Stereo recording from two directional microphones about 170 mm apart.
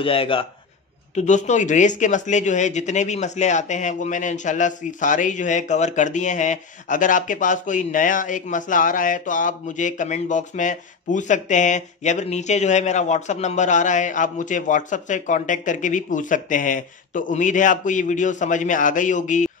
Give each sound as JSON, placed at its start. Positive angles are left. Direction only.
{"t": 0.0, "sound": "a man's voice", "side_deg": 30}
{"t": 1.1, "sound": "speech", "side_deg": 45}